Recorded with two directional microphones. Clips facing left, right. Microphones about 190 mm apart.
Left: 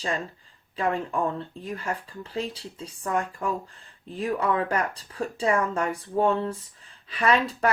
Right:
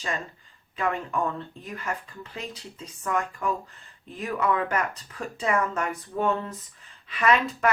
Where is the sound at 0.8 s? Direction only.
30° left (ahead or behind).